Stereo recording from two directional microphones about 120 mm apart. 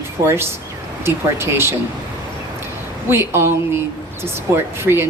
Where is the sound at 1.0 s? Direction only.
20° right (ahead or behind).